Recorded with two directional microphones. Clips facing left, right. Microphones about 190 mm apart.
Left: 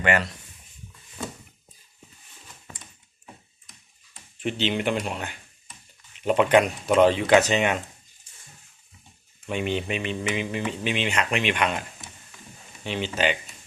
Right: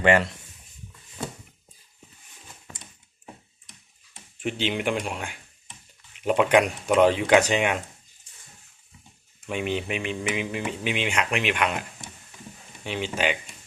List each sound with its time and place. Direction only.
0.0 s speech: 25° right (ahead or behind)
4.4 s speech: 10° right (ahead or behind)
9.5 s speech: 5° right (ahead or behind)